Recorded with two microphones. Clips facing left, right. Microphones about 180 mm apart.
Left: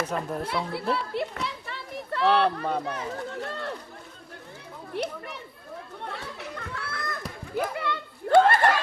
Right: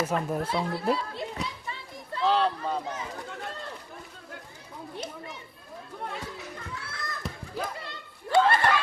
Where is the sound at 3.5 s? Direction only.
70° left (ahead or behind).